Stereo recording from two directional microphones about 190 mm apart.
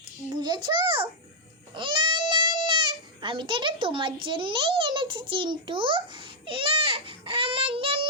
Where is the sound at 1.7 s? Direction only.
25° right (ahead or behind).